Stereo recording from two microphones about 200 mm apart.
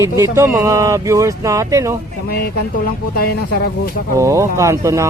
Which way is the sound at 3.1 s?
50° left (ahead or behind).